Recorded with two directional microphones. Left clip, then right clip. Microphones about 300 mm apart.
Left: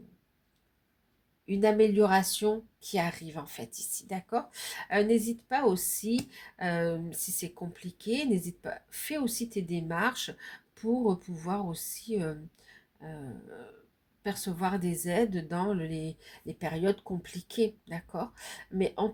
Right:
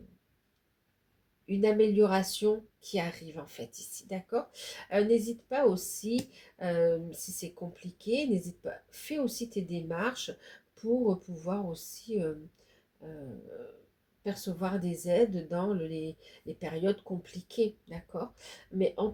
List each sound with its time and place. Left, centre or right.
1.5 s speech: left
14.3 s speech: left